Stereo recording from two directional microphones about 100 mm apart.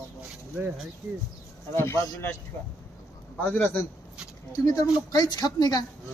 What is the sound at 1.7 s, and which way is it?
Speech, 25° left (ahead or behind).